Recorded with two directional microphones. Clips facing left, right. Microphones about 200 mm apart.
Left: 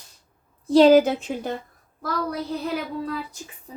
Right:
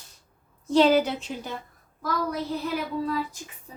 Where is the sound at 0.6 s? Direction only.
35° left (ahead or behind).